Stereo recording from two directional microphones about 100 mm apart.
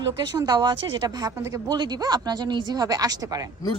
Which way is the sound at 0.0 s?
40° right (ahead or behind).